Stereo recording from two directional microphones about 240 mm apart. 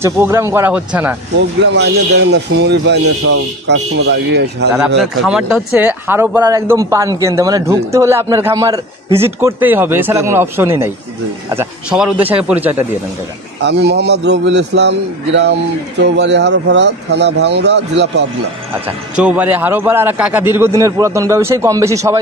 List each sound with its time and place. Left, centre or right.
0.0 s speech: centre
1.7 s a man's voice: right
4.7 s speech: centre
13.6 s a man's voice: right
19.1 s speech: centre